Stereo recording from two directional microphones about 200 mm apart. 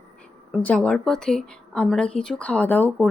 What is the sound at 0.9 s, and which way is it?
Speech, 5° left (ahead or behind).